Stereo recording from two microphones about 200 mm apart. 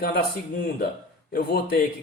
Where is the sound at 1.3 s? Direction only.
50° left (ahead or behind).